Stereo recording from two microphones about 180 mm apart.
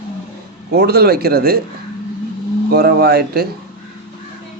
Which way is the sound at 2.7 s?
60° right (ahead or behind).